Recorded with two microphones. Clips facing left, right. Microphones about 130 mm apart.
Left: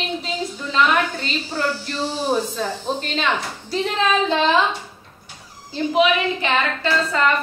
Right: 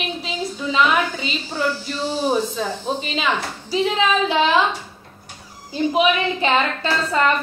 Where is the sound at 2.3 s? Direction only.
5° right (ahead or behind).